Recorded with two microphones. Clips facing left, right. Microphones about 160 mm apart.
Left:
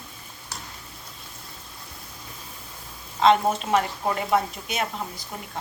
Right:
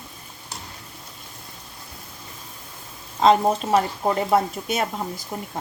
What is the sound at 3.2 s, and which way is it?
Speech, 35° right (ahead or behind).